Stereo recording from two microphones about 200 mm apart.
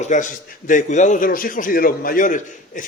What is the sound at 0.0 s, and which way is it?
A man's voice, 40° left (ahead or behind).